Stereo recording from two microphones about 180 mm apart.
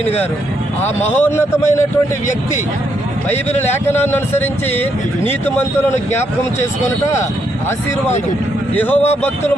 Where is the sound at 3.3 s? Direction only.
40° left (ahead or behind).